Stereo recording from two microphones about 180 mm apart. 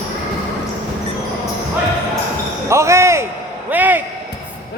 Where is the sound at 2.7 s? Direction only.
15° right (ahead or behind).